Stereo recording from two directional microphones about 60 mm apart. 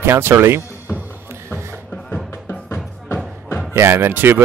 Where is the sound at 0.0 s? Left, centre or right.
Right.